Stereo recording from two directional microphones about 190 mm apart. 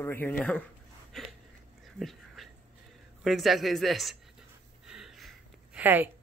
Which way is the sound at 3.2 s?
Centre (ahead or behind).